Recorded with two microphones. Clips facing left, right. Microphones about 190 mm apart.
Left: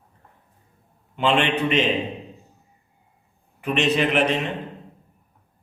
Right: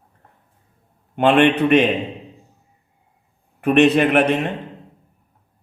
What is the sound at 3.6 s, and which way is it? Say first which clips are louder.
Speech: right 8 dB; 55° right (ahead or behind).